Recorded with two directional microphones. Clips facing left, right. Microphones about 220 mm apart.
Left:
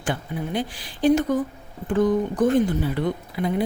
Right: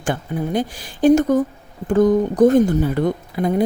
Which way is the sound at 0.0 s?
45° right (ahead or behind).